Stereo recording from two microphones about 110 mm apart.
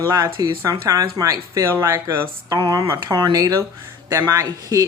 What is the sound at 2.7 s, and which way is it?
Speech, 40° right (ahead or behind).